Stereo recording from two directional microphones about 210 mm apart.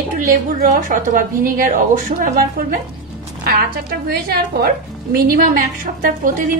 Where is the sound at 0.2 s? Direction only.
40° right (ahead or behind).